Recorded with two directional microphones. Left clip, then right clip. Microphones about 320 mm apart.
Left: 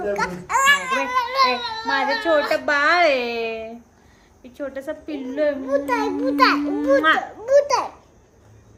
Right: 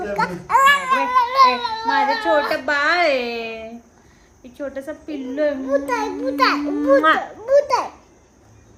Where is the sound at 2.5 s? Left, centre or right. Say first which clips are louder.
Left 1 dB; centre.